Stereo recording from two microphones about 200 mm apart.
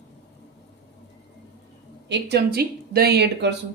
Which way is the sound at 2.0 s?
55° right (ahead or behind).